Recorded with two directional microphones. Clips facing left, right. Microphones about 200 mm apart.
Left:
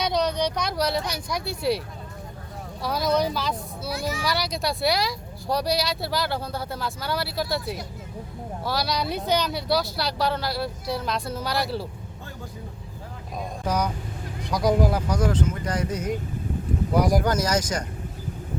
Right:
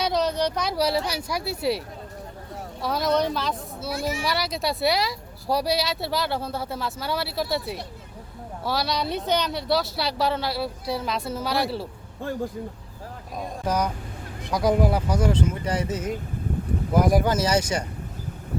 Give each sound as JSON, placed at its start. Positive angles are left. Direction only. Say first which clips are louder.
{"t": 0.0, "sound": "speech", "louder": "right 1 dB", "side_deg": -5}
{"t": 2.8, "sound": "speech", "louder": "even", "side_deg": 0}
{"t": 4.1, "sound": "speech", "louder": "even", "side_deg": -25}
{"t": 4.4, "sound": "speech", "louder": "right 1 dB", "side_deg": -5}
{"t": 13.4, "sound": "speech", "louder": "right 1 dB", "side_deg": -5}